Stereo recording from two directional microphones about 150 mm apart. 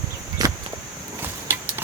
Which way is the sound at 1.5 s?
15° right (ahead or behind).